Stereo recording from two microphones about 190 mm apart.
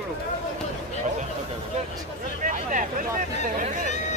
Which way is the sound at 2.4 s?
45° right (ahead or behind).